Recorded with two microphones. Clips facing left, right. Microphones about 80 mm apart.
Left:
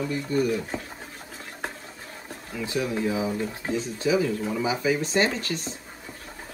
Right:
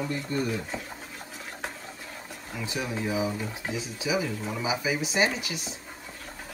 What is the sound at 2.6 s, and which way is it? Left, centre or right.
Speech, right.